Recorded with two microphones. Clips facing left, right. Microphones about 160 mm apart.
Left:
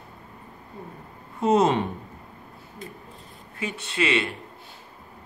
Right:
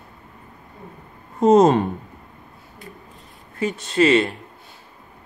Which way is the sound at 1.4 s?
45° right (ahead or behind).